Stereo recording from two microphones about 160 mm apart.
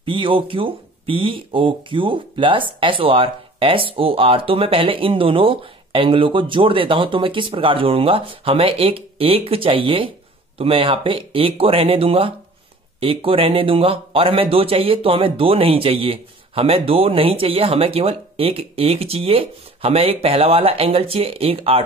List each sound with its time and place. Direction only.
0.0 s speech: 30° right (ahead or behind)